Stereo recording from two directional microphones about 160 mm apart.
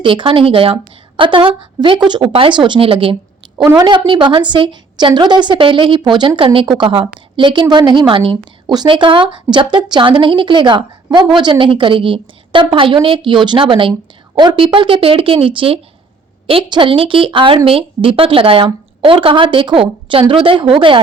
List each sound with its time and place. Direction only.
0.0 s a woman's voice: 30° right (ahead or behind)